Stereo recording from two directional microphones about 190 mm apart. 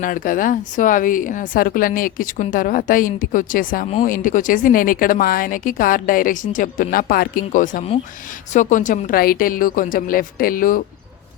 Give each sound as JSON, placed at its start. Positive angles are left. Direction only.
{"t": 0.0, "sound": "a woman's voice", "side_deg": 45}